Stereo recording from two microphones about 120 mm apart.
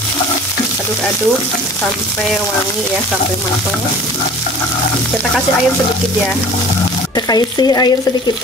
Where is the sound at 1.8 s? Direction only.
5° left (ahead or behind).